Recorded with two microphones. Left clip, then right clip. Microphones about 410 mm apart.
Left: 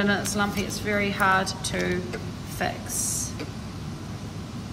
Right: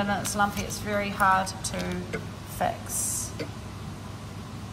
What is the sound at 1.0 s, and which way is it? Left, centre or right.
Speech, centre.